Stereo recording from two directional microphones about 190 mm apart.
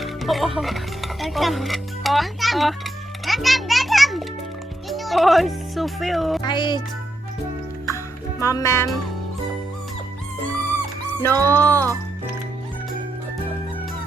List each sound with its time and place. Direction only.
0.0 s speech: centre (ahead or behind)
6.4 s music: 25° left (ahead or behind)
7.9 s music: 15° left (ahead or behind)
11.2 s speech: 10° left (ahead or behind)